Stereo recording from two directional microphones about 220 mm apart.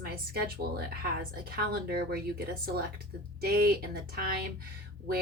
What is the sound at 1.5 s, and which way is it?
Speech, 45° right (ahead or behind).